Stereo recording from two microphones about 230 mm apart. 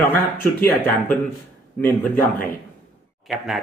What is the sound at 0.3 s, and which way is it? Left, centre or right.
Speech, centre.